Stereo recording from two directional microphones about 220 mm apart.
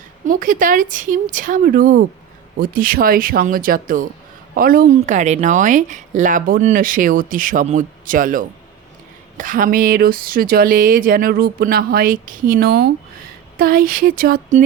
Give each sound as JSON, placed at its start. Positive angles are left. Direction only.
{"t": 0.3, "sound": "a woman's voice", "side_deg": -35}